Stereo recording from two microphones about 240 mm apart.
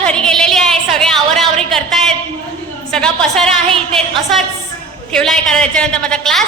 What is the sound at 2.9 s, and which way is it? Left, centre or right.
Speech, centre.